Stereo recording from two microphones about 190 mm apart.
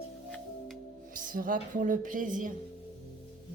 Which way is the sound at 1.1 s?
45° right (ahead or behind).